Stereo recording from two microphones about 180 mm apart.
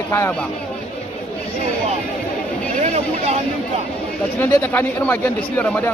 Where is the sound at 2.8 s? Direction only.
35° right (ahead or behind).